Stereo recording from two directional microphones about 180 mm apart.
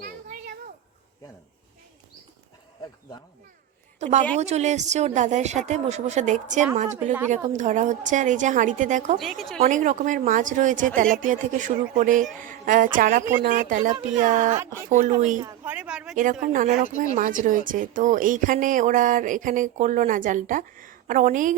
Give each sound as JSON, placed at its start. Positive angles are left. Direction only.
{"t": 0.0, "sound": "a sound", "side_deg": -45}
{"t": 4.0, "sound": "a woman's voice", "side_deg": -40}
{"t": 9.1, "sound": "speech", "side_deg": 0}
{"t": 9.6, "sound": "a woman's voice", "side_deg": -45}
{"t": 15.6, "sound": "speech", "side_deg": -5}
{"t": 16.1, "sound": "a woman's voice", "side_deg": -45}